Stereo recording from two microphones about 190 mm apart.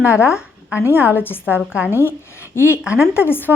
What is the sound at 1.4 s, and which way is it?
Speech, 5° right (ahead or behind).